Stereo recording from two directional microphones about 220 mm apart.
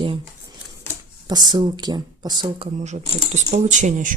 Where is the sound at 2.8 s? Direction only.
30° right (ahead or behind).